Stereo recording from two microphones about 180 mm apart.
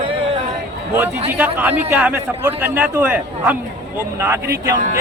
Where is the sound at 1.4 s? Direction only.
10° right (ahead or behind).